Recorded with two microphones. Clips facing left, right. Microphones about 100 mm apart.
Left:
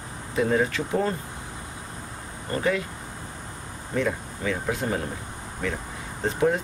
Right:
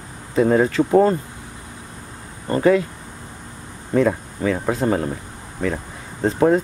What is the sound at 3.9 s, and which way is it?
Speech, 40° right (ahead or behind).